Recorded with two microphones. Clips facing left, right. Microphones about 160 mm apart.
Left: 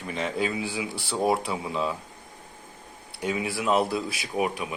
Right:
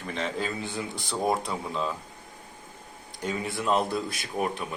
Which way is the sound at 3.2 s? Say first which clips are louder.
Left 2 dB; 10° left (ahead or behind).